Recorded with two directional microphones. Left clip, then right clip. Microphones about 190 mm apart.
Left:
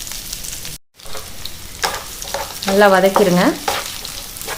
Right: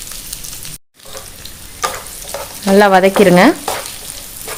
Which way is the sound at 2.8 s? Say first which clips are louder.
Right 2 dB; 40° right (ahead or behind).